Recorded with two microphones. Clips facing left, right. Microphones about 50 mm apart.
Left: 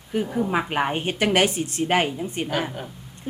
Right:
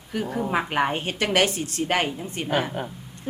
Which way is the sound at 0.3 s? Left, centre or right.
Centre.